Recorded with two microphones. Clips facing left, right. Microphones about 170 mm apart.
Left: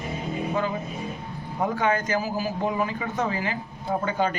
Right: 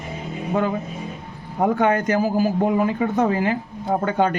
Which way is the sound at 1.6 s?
55° right (ahead or behind).